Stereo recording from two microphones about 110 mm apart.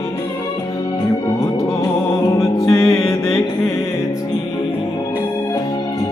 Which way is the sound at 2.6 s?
35° left (ahead or behind).